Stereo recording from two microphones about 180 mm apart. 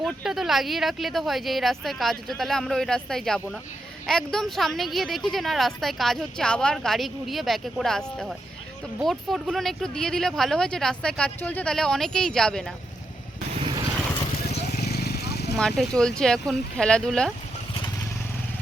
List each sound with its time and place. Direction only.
0.0 s a woman's voice: centre (ahead or behind)
14.7 s vehicle: 60° left (ahead or behind)
15.5 s a woman's voice: 5° left (ahead or behind)